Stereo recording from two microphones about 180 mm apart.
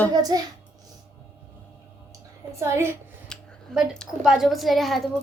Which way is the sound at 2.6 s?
15° right (ahead or behind).